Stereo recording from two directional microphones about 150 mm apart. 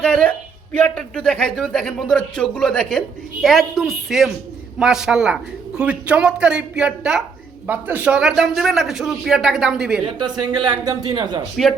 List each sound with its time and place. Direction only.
0.0 s a man's voice: 5° left (ahead or behind)
10.2 s speech: 30° right (ahead or behind)